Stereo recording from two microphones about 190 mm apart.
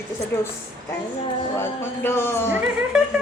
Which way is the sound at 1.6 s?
10° left (ahead or behind).